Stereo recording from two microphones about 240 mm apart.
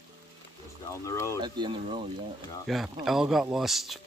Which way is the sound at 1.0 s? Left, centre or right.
Centre.